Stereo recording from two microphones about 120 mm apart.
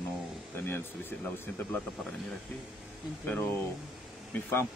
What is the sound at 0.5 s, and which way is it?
Speech, 20° left (ahead or behind).